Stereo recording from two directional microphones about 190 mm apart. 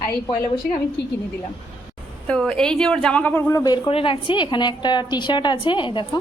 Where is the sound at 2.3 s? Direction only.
5° left (ahead or behind).